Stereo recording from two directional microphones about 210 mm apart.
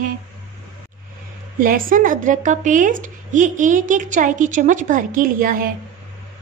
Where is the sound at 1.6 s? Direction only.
40° right (ahead or behind).